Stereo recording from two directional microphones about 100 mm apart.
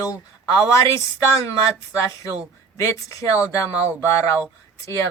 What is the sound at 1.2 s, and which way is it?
Speech, 25° left (ahead or behind).